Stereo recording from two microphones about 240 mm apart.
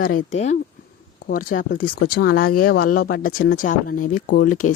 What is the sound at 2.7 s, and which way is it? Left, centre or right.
Speech, left.